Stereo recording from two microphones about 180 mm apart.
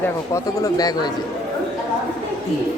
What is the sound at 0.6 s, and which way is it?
Speech, 20° left (ahead or behind).